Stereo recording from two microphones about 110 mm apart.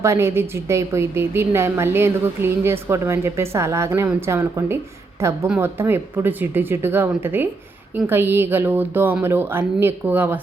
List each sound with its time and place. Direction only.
0.0 s a woman's voice: 25° right (ahead or behind)